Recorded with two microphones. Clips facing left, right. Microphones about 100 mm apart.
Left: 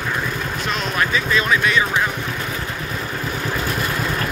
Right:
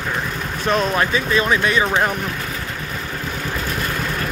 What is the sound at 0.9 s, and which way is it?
Speech, 30° right (ahead or behind).